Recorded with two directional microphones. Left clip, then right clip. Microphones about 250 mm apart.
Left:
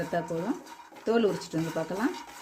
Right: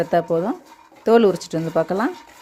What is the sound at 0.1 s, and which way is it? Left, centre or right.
Speech, right.